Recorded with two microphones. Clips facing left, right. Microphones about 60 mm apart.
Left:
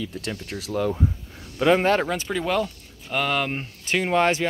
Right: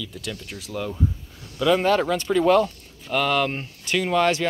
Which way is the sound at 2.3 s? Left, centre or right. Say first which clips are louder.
Right 8 dB; centre.